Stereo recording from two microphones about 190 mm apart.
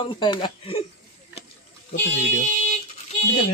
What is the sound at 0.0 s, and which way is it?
Speech, 25° left (ahead or behind).